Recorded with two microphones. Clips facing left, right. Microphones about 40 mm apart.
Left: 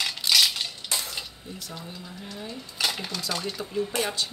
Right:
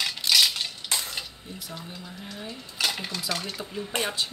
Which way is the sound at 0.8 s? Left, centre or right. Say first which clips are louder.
Right 1 dB; right.